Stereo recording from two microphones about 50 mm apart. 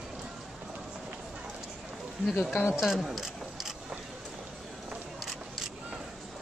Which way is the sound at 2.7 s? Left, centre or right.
Centre.